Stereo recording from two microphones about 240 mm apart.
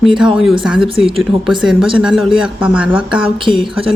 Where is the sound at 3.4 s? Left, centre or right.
Right.